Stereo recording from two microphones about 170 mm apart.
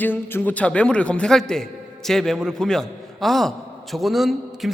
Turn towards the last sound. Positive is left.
turn(degrees=0)  # may be behind; listen again after turning